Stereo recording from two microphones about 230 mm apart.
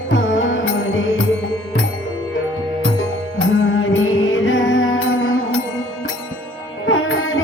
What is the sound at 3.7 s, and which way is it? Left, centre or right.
Music, left.